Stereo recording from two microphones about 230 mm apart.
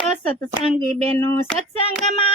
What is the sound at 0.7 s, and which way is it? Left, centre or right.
Speech, right.